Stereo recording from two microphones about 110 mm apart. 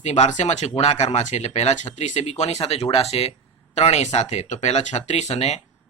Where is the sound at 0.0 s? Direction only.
90° left.